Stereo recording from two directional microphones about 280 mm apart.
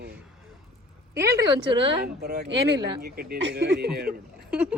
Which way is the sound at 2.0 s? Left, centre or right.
Right.